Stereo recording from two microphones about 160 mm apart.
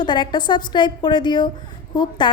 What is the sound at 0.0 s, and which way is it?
A woman's voice, 30° left (ahead or behind).